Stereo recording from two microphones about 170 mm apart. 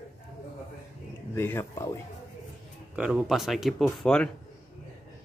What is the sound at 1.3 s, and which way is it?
Speech, 15° left (ahead or behind).